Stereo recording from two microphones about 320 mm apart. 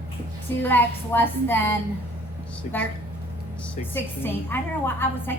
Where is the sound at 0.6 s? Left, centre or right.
Centre.